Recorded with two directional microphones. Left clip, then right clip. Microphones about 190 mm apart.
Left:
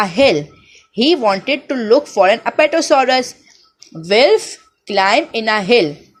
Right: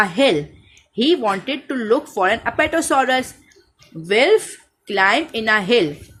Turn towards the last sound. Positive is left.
turn(degrees=15)  # may be behind; listen again after turning